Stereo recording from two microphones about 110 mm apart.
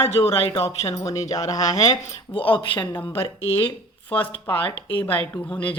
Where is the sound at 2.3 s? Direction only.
50° left (ahead or behind).